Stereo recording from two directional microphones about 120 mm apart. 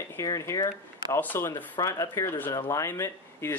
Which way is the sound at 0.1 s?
25° left (ahead or behind).